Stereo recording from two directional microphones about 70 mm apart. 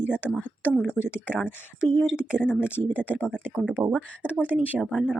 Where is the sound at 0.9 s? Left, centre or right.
Left; by 3.6 s centre.